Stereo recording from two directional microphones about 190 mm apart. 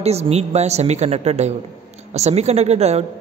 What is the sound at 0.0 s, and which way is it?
A woman's voice, 35° right (ahead or behind).